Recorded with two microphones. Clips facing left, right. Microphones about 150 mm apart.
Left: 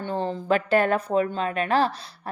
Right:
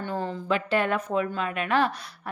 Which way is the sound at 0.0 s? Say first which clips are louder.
Left 3 dB; 25° left (ahead or behind).